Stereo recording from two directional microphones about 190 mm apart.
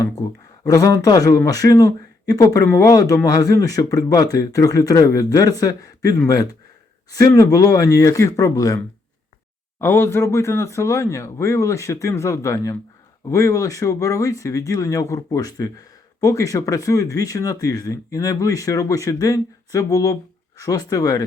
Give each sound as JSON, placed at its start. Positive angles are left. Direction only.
{"t": 0.0, "sound": "speech", "side_deg": 20}
{"t": 9.8, "sound": "speech", "side_deg": 10}